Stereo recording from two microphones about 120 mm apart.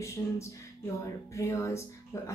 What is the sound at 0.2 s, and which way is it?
Speech, 25° left (ahead or behind).